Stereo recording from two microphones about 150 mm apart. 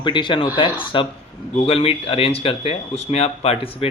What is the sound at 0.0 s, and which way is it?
Speech, 30° left (ahead or behind).